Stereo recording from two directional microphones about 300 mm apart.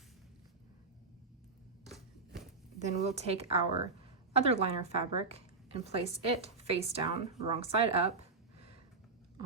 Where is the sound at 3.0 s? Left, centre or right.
Right.